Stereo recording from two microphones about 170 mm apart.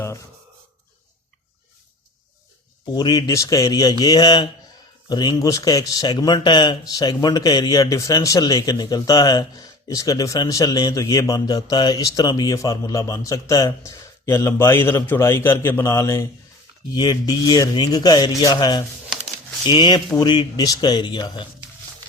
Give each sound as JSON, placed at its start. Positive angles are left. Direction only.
{"t": 2.9, "sound": "speech", "side_deg": 25}